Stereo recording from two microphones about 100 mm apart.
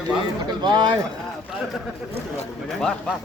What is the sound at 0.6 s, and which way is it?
Speech, 50° right (ahead or behind).